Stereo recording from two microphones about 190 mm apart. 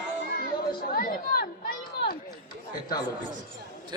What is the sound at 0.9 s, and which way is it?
Chatter, 50° left (ahead or behind).